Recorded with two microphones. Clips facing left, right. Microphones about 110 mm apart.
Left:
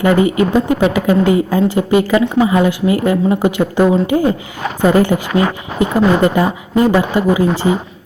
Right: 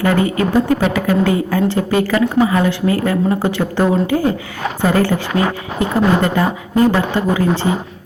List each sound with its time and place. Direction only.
0.0 s a woman's voice: 15° left (ahead or behind)